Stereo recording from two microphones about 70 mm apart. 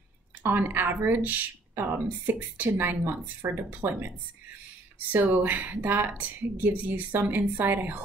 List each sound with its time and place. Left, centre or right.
0.4 s speech: right
3.4 s speech: right